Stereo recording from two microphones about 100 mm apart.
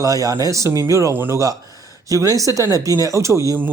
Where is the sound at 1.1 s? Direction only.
20° right (ahead or behind).